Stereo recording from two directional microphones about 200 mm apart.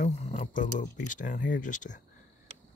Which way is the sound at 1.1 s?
40° left (ahead or behind).